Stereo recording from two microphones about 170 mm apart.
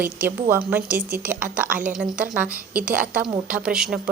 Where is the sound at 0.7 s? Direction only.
10° right (ahead or behind).